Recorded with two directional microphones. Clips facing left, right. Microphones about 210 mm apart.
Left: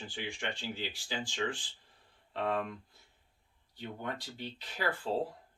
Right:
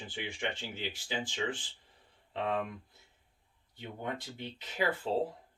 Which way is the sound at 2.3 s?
15° right (ahead or behind).